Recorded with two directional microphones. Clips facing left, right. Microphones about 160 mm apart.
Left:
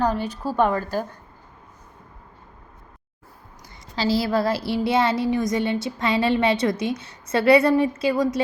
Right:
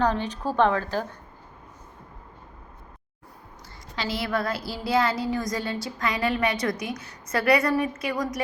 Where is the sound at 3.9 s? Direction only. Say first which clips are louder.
Left 6 dB; 30° left (ahead or behind).